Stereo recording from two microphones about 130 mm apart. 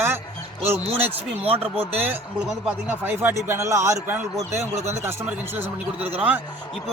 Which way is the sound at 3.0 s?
15° right (ahead or behind).